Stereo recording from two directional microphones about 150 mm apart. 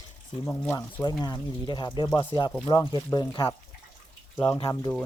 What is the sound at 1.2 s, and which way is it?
Speech, 30° left (ahead or behind).